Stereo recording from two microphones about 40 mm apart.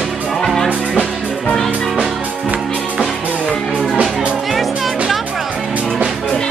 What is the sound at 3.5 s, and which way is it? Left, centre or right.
Music, centre.